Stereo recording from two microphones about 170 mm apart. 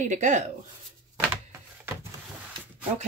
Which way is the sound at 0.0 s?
45° right (ahead or behind).